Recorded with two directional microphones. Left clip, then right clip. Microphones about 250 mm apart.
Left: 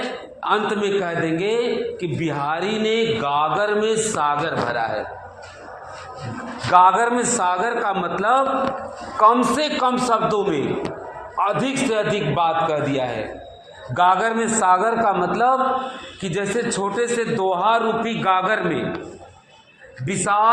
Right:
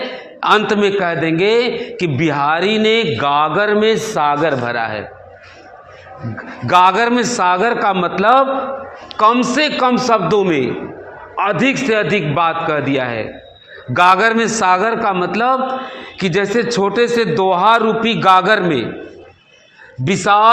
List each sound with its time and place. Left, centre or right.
0.3 s a man's voice: right
6.7 s a man's voice: right
13.9 s a man's voice: right
20.1 s a man's voice: right